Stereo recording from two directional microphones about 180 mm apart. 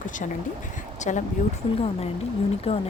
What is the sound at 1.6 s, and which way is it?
A woman's voice, 30° left (ahead or behind).